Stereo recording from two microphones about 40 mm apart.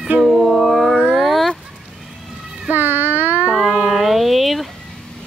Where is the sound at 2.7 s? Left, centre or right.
Right.